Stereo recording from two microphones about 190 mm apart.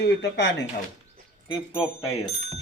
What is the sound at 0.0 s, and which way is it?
Speech, 65° left (ahead or behind).